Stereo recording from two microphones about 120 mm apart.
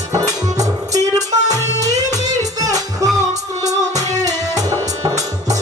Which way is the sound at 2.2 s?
75° right (ahead or behind).